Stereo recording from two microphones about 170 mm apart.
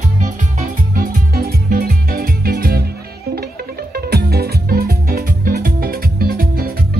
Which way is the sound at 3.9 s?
65° right (ahead or behind).